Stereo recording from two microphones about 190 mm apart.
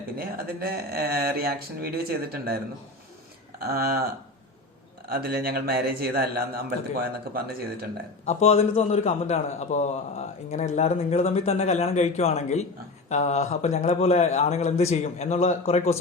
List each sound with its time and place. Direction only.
0.2 s speech: 55° right (ahead or behind)
3.6 s speech: 55° right (ahead or behind)
5.0 s speech: 55° right (ahead or behind)
8.2 s a man's voice: 35° left (ahead or behind)